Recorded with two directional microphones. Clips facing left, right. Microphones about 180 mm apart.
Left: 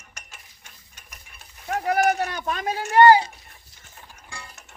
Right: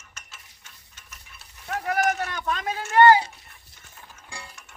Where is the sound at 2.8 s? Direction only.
15° left (ahead or behind).